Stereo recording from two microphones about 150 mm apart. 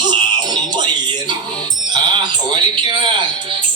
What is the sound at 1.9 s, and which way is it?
Speech, 30° right (ahead or behind).